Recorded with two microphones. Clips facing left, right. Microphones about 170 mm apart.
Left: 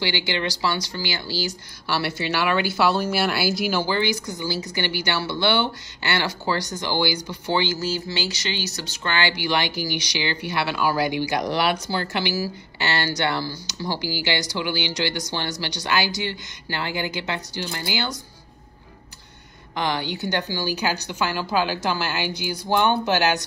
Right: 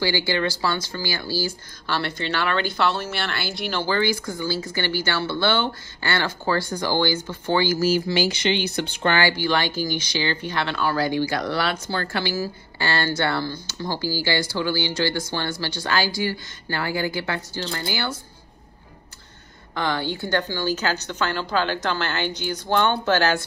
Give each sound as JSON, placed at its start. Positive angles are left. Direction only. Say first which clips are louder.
{"t": 0.0, "sound": "a woman's voice", "louder": "right 3 dB", "side_deg": 20}
{"t": 3.8, "sound": "a woman's voice", "louder": "right 1 dB", "side_deg": 15}
{"t": 9.2, "sound": "a woman's voice", "louder": "right 2 dB", "side_deg": 15}
{"t": 19.7, "sound": "a woman's voice", "louder": "even", "side_deg": 15}